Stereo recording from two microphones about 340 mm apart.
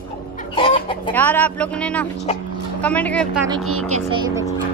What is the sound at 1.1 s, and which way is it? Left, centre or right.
Speech, centre.